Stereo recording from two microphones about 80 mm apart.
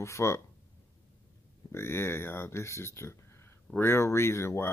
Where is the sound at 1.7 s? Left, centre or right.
Left.